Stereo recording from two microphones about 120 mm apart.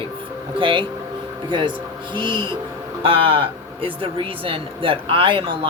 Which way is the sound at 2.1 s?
40° right (ahead or behind).